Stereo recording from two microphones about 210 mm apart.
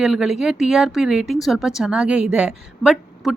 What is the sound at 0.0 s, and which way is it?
Speech, centre (ahead or behind).